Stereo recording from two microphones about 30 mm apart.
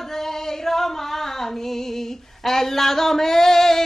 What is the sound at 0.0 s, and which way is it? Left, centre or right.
Music, centre.